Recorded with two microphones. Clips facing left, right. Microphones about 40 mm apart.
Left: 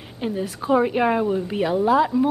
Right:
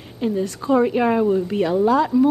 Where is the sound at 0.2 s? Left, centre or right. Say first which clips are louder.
Right 4 dB; centre.